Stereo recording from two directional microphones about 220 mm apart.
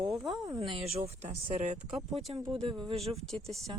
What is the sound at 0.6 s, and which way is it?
Speech, 25° right (ahead or behind).